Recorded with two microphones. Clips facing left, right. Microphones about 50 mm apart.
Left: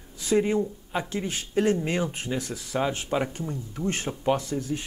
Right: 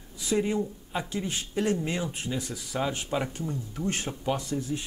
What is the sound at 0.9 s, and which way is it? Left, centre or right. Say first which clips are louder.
Speech: left 2 dB; left.